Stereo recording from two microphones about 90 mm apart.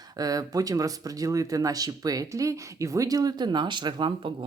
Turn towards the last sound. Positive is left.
turn(degrees=-65)  # may be behind; listen again after turning